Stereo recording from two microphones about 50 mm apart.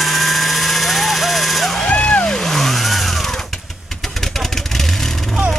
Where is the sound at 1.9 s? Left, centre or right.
Left.